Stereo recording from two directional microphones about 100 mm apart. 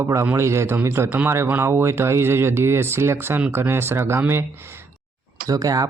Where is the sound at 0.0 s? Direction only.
30° right (ahead or behind).